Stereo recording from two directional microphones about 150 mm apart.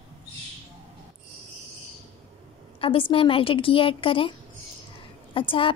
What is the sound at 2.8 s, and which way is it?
A woman's voice, 35° left (ahead or behind).